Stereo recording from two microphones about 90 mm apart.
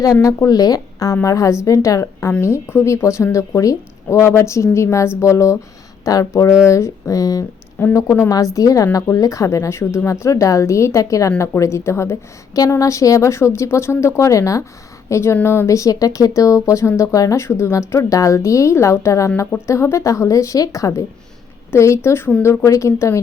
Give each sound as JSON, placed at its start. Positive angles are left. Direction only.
{"t": 0.0, "sound": "speech", "side_deg": 35}
{"t": 7.8, "sound": "a woman's voice", "side_deg": 20}
{"t": 8.5, "sound": "a woman's voice", "side_deg": 40}